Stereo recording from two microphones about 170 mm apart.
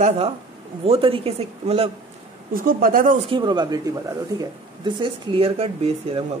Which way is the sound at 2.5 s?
55° right (ahead or behind).